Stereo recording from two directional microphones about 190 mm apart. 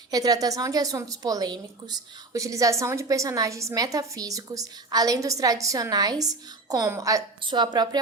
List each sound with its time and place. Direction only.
0.1 s a woman's voice: 20° right (ahead or behind)